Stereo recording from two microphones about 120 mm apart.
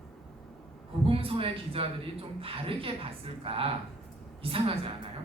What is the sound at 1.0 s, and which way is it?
A woman's voice, 50° right (ahead or behind).